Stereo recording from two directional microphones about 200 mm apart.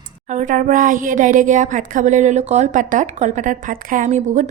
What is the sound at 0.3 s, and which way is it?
Speech, 40° right (ahead or behind).